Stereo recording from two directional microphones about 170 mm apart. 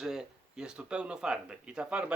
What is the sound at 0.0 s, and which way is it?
Speech, 5° right (ahead or behind).